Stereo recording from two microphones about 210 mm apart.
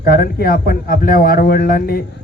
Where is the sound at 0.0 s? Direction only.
45° left (ahead or behind).